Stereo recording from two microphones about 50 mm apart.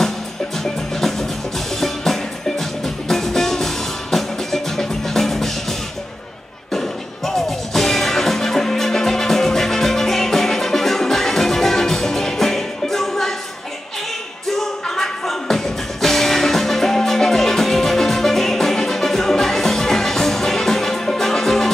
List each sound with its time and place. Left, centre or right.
1.8 s music: centre
14.6 s music: centre